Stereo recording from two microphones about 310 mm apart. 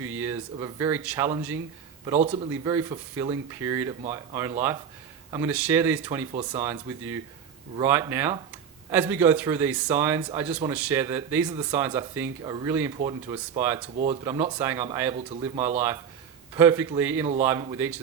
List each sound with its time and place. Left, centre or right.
0.0 s speech: centre
2.0 s speech: centre
15.1 s speech: centre
16.6 s speech: centre